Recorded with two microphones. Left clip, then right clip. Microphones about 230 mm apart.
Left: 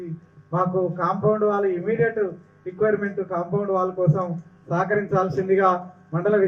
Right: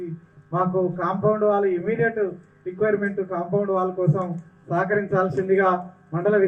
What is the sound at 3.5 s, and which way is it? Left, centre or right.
A man's voice, right.